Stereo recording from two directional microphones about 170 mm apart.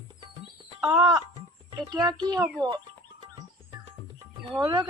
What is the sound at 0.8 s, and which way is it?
Speech, 20° right (ahead or behind).